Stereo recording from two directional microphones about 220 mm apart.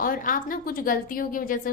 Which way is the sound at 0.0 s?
40° left (ahead or behind).